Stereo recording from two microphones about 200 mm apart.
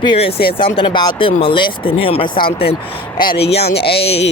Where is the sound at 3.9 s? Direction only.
30° left (ahead or behind).